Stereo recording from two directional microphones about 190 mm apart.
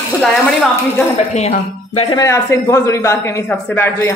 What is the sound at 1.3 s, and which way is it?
Speech, 35° left (ahead or behind).